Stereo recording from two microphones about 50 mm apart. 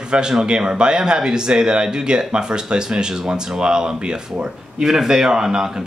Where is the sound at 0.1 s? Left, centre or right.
Centre.